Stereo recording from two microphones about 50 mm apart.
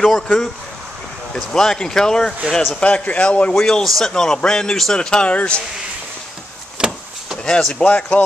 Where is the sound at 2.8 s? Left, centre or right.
Left.